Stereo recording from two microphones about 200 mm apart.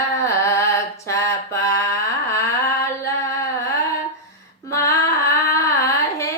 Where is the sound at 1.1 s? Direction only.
15° left (ahead or behind).